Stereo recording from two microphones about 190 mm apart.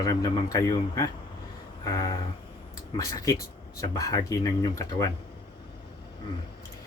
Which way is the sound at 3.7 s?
15° left (ahead or behind).